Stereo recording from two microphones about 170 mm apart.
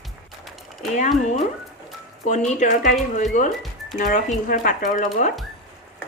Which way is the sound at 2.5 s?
45° left (ahead or behind).